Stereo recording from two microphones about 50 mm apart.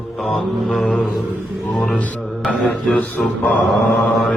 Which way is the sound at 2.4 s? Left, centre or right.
Centre.